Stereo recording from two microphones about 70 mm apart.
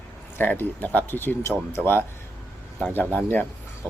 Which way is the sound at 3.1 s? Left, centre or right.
Left.